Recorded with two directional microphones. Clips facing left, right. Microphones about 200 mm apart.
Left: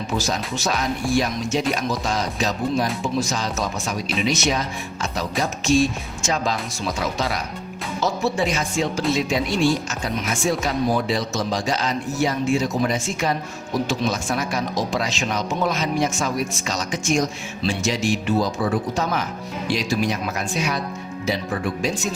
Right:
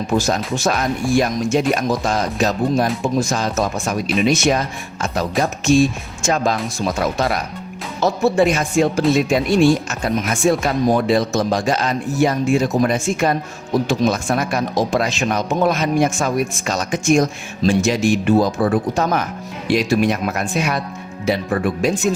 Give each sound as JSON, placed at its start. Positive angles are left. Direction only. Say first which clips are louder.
{"t": 0.2, "sound": "speech", "louder": "right 6 dB", "side_deg": -55}